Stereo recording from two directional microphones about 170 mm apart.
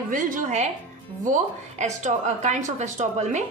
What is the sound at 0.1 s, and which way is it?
Speech, 50° right (ahead or behind).